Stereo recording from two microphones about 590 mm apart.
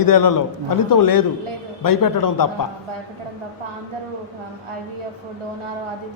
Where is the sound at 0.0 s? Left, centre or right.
Left.